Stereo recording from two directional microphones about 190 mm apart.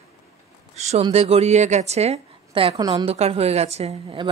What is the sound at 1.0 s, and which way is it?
A woman's voice, 35° right (ahead or behind).